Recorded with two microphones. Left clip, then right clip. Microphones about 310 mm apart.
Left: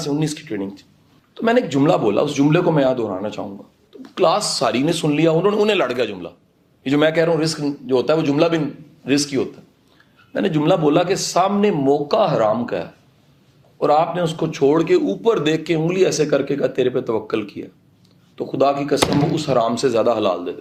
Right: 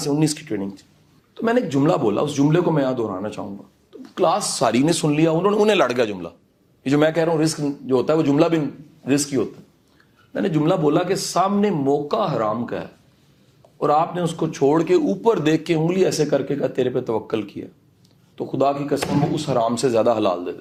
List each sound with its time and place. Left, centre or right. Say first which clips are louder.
0.0 s a man's voice: right 1 dB; right